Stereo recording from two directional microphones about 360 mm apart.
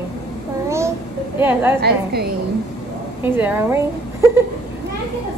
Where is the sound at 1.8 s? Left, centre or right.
Right.